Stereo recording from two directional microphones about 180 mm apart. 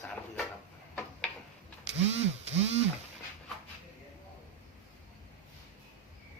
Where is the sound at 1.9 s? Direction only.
35° right (ahead or behind).